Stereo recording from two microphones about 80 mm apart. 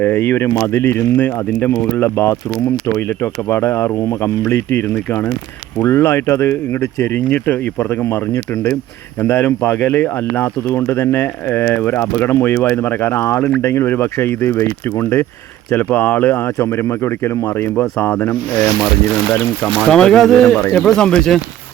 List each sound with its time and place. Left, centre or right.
0.0 s speech: left
3.5 s speech: left
5.8 s speech: left
7.0 s speech: left
8.0 s speech: left
15.7 s speech: left
17.7 s speech: left
19.6 s speech: centre